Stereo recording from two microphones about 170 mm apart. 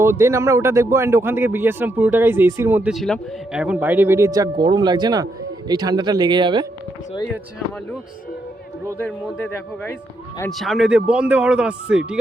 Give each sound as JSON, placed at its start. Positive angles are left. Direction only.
{"t": 0.0, "sound": "speech", "side_deg": -15}
{"t": 2.9, "sound": "speech", "side_deg": 0}
{"t": 9.0, "sound": "a man's voice", "side_deg": 10}
{"t": 10.5, "sound": "speech", "side_deg": 0}